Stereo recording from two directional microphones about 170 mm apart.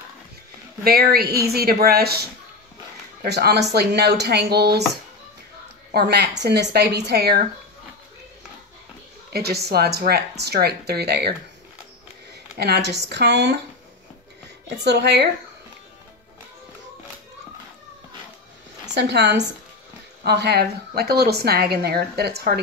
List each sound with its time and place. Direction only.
0.8 s a woman's voice: 65° right (ahead or behind)
3.3 s a woman's voice: 75° right (ahead or behind)
5.9 s a woman's voice: 75° right (ahead or behind)
9.3 s a woman's voice: 70° right (ahead or behind)
12.5 s speech: 70° right (ahead or behind)
14.8 s a woman's voice: 90° right
18.9 s a woman's voice: 90° right
20.2 s a woman's voice: 75° right (ahead or behind)